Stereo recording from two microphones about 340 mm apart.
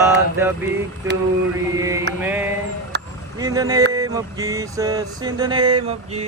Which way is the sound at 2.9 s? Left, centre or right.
Right.